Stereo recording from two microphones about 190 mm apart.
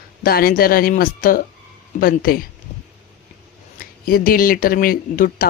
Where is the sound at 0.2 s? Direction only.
50° left (ahead or behind).